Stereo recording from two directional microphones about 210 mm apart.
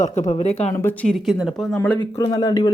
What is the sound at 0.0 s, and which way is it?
Speech, 35° left (ahead or behind).